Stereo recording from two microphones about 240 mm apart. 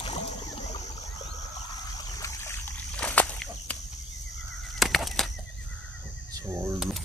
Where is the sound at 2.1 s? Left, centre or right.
Centre.